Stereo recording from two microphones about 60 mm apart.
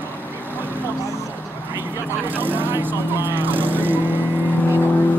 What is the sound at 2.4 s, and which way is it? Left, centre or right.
Vehicle, right.